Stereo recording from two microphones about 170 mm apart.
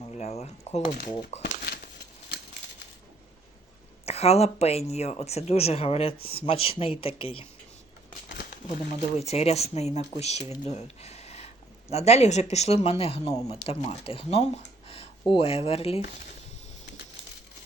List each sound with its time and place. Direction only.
0.2 s speech: 40° left (ahead or behind)
4.0 s speech: 35° left (ahead or behind)
8.6 s speech: 45° left (ahead or behind)
10.3 s speech: 20° right (ahead or behind)
10.7 s speech: 40° left (ahead or behind)